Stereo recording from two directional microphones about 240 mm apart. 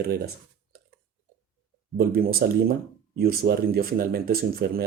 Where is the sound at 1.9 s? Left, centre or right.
Right.